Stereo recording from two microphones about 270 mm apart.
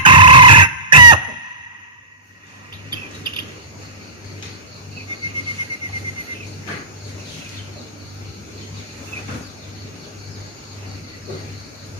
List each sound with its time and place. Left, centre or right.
0.0 s squeal: centre